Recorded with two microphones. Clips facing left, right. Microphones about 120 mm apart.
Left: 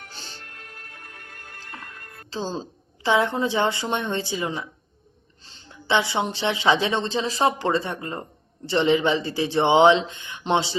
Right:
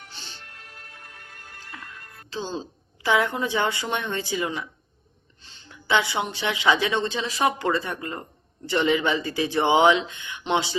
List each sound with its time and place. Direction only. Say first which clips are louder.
0.0 s music: left 2 dB; 45° left (ahead or behind)
2.3 s speech: left 2 dB; 35° left (ahead or behind)
3.0 s speech: left 2 dB; 25° left (ahead or behind)
5.9 s speech: left 1 dB; 25° left (ahead or behind)